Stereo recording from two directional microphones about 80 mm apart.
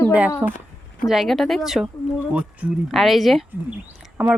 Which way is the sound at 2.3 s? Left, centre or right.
Centre.